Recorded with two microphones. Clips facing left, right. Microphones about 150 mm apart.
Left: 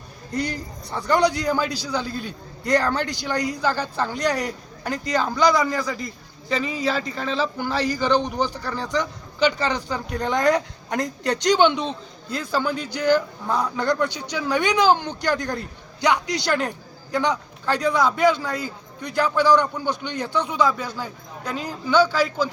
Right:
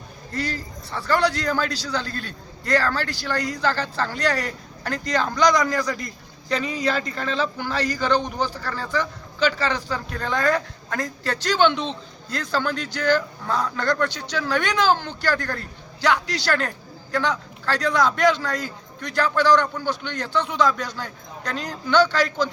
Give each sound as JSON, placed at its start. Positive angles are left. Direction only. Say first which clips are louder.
{"t": 0.3, "sound": "a man's voice", "louder": "left 2 dB", "side_deg": 15}